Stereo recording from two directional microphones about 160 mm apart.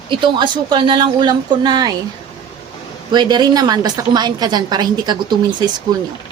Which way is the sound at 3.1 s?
25° right (ahead or behind).